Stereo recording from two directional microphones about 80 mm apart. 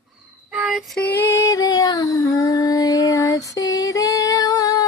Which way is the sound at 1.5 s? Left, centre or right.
Left.